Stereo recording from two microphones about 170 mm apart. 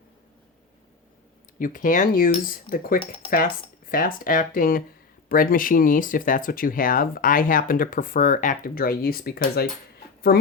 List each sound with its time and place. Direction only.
1.5 s speech: 55° left (ahead or behind)